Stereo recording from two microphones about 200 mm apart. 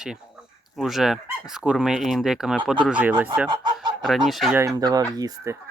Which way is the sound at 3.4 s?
20° right (ahead or behind).